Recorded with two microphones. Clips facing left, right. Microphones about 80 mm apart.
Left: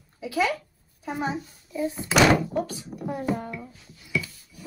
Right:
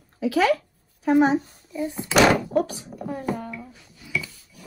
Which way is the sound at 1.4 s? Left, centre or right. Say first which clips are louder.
Even; right.